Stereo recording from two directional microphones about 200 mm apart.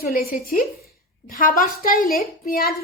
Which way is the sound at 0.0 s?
45° left (ahead or behind).